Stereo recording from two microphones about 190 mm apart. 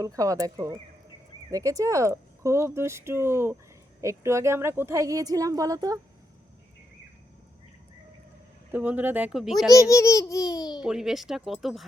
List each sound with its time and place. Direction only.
0.0 s speech: 20° right (ahead or behind)
8.7 s speech: 10° right (ahead or behind)
9.9 s speech: 15° left (ahead or behind)
10.8 s speech: 5° right (ahead or behind)